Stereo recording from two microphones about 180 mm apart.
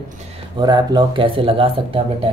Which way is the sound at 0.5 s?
25° right (ahead or behind).